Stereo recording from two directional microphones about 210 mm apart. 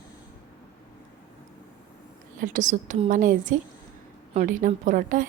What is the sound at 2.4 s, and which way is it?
A woman's voice, 35° right (ahead or behind).